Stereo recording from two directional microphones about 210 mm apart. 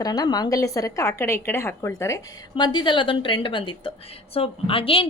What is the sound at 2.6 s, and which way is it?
A woman's voice, 20° left (ahead or behind).